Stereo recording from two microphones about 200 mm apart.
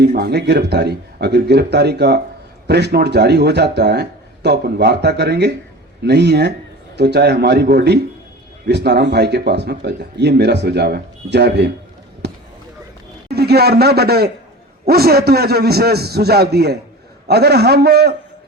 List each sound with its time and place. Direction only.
0.0 s speech: 55° right (ahead or behind)
12.2 s basketball bounce: 55° right (ahead or behind)
13.2 s a man's voice: 55° right (ahead or behind)